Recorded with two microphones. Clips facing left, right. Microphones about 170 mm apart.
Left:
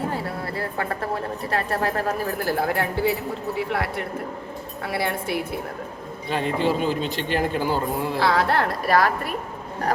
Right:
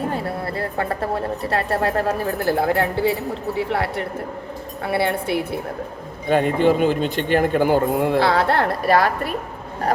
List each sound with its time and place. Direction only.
0.1 s speech: 25° right (ahead or behind)
4.9 s speech: 25° right (ahead or behind)
6.2 s speech: 50° right (ahead or behind)
8.3 s speech: 25° right (ahead or behind)